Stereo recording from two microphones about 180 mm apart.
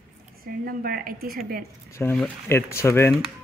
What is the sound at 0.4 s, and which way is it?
A woman's voice, 55° right (ahead or behind).